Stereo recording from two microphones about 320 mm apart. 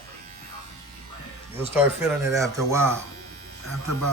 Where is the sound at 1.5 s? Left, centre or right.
Centre.